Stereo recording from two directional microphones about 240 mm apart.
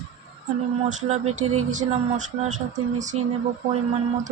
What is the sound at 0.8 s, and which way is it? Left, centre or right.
Speech, right.